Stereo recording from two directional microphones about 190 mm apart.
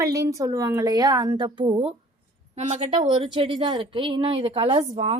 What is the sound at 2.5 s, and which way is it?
Speech, 35° right (ahead or behind).